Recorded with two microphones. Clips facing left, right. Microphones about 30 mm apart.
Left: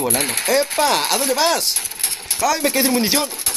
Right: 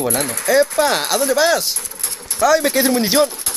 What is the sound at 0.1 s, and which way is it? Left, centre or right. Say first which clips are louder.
Speech: even; left.